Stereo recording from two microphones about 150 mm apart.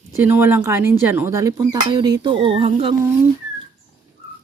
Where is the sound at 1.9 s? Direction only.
25° right (ahead or behind).